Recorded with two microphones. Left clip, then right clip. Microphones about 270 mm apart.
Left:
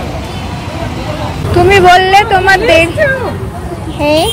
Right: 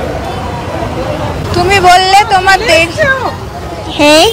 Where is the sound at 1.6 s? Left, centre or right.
Centre.